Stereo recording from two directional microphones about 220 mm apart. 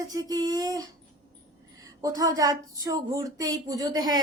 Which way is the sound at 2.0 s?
15° right (ahead or behind).